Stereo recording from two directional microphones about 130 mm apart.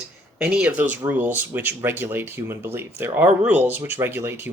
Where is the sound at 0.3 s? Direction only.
10° right (ahead or behind).